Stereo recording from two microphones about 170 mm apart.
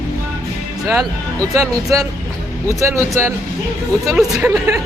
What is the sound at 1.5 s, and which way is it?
Speech, 20° right (ahead or behind).